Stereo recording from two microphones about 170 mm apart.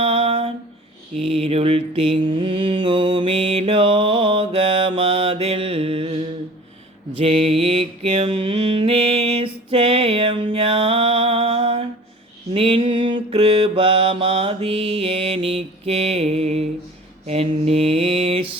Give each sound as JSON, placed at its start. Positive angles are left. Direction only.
{"t": 0.0, "sound": "a sound", "side_deg": -35}
{"t": 1.1, "sound": "mantra", "side_deg": -35}
{"t": 7.2, "sound": "mantra", "side_deg": -35}